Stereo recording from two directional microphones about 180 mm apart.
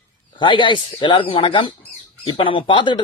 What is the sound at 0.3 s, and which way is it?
Speech, 25° left (ahead or behind).